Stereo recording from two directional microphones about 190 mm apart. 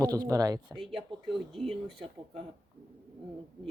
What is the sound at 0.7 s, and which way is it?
Speech, centre (ahead or behind).